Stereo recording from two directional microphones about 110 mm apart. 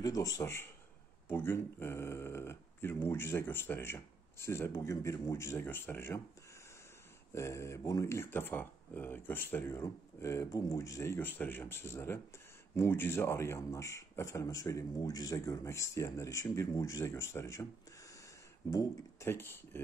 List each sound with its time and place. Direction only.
0.0 s speech: 35° left (ahead or behind)
7.3 s speech: 25° left (ahead or behind)
18.7 s speech: 25° left (ahead or behind)